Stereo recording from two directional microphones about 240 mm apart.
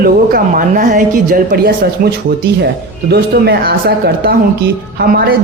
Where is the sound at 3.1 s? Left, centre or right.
Right.